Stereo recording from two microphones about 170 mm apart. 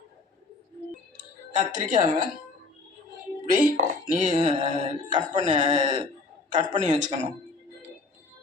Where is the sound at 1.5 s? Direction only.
45° right (ahead or behind).